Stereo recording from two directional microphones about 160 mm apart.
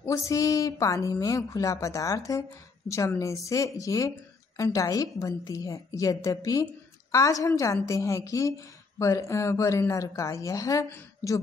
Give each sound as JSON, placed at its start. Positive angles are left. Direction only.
{"t": 0.0, "sound": "a woman's voice", "side_deg": 20}